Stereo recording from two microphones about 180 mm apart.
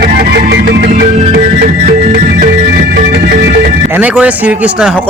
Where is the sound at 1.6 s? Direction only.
45° right (ahead or behind); by 3.3 s 65° right (ahead or behind).